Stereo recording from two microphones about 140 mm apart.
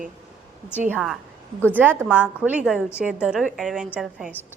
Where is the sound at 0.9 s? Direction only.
5° right (ahead or behind).